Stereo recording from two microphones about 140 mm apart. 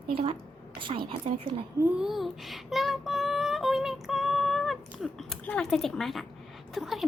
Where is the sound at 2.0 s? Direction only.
Centre (ahead or behind).